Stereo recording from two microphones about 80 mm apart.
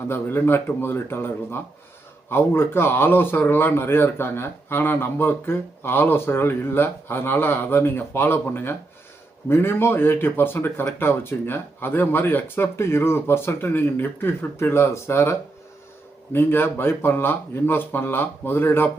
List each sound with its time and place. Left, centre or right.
0.1 s speech: left